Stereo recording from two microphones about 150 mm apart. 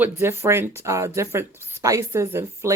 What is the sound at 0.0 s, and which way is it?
Speech, 15° right (ahead or behind).